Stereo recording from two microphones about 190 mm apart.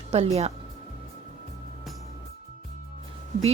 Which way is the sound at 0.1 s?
35° right (ahead or behind).